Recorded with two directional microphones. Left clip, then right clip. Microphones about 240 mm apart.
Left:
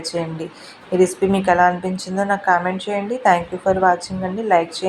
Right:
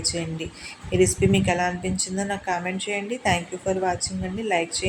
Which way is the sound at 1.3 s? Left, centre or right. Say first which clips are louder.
Left 8 dB; centre.